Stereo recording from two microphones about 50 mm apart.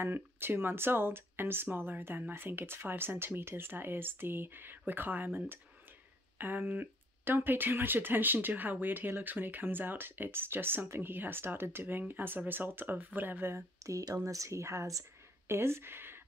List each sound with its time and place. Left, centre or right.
0.0 s speech: right
13.8 s speech: right